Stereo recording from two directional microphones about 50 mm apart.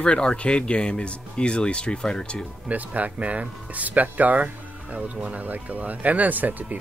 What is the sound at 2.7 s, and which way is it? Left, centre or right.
Speech, right.